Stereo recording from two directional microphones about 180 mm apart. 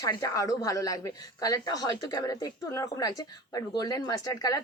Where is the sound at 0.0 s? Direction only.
20° left (ahead or behind).